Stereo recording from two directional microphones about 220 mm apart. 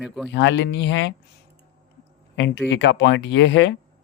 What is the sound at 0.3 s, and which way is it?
Speech, 55° left (ahead or behind).